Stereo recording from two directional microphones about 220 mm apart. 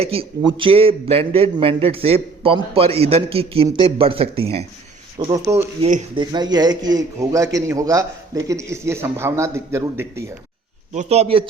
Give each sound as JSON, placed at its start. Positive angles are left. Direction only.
{"t": 0.0, "sound": "a man's voice", "side_deg": -25}
{"t": 5.2, "sound": "a man's voice", "side_deg": -15}
{"t": 10.9, "sound": "a man's voice", "side_deg": -30}